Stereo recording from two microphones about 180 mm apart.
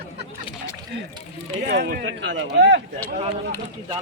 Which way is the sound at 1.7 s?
60° right (ahead or behind).